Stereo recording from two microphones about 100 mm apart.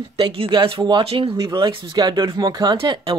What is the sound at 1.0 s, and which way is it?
Speech, 65° right (ahead or behind).